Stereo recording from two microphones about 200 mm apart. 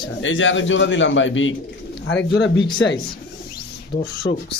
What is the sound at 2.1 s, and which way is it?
Speech, 60° left (ahead or behind).